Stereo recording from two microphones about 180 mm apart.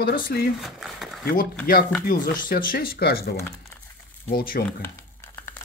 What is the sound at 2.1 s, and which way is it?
Speech, 50° left (ahead or behind).